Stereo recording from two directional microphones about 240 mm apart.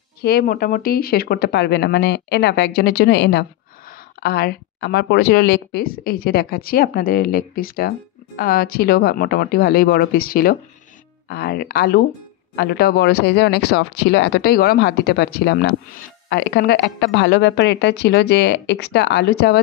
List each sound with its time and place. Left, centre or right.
0.2 s speech: left